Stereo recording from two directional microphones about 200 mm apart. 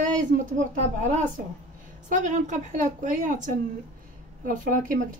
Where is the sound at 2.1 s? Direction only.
40° right (ahead or behind).